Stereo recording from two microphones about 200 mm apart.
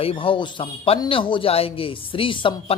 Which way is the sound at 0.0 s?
25° left (ahead or behind).